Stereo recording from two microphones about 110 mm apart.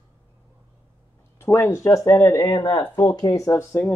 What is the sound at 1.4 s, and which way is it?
Speech, 25° left (ahead or behind).